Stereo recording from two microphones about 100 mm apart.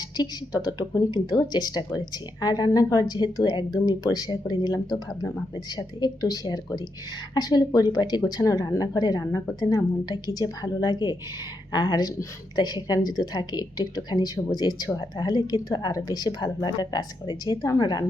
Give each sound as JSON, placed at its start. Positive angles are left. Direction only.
{"t": 0.2, "sound": "a woman's voice", "side_deg": 45}